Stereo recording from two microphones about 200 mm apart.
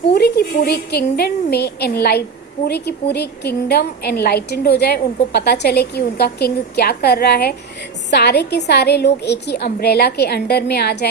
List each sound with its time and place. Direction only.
0.1 s a woman's voice: 55° left (ahead or behind)